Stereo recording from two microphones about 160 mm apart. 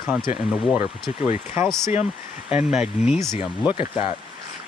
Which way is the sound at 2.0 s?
5° right (ahead or behind).